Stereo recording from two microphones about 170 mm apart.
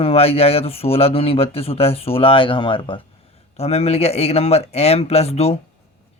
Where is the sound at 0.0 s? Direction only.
35° left (ahead or behind).